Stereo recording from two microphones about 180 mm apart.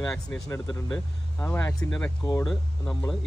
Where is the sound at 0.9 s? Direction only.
10° left (ahead or behind).